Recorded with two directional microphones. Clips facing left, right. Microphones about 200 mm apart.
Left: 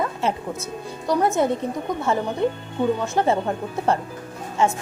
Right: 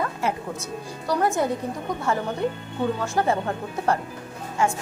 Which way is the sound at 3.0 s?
25° left (ahead or behind).